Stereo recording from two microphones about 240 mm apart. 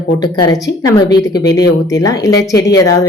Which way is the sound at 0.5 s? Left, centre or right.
Centre.